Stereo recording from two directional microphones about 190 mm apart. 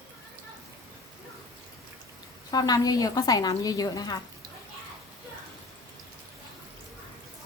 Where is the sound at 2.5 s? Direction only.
20° left (ahead or behind).